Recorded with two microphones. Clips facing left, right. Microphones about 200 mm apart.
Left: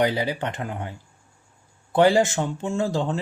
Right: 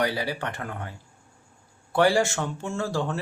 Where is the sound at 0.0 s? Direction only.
20° left (ahead or behind).